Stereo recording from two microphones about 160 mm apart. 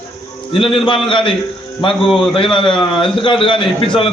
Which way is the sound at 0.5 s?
35° left (ahead or behind).